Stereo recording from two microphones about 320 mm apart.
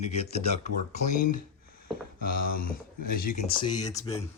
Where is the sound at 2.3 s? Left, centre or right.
Left.